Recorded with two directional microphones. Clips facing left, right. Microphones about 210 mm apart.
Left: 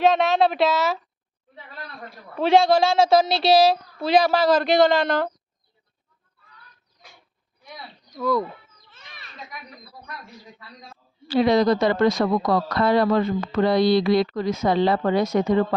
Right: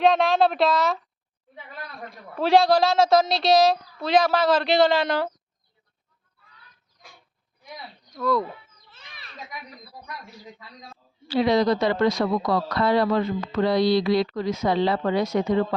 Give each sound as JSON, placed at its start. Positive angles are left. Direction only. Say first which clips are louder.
{"t": 0.0, "sound": "a woman's voice", "louder": "left 1 dB", "side_deg": 0}
{"t": 2.0, "sound": "a woman's voice", "louder": "left 2 dB", "side_deg": 0}
{"t": 8.1, "sound": "a woman's voice", "louder": "left 1 dB", "side_deg": 5}
{"t": 8.9, "sound": "children playing", "louder": "left 1 dB", "side_deg": 0}
{"t": 11.3, "sound": "a woman's voice", "louder": "left 2 dB", "side_deg": 50}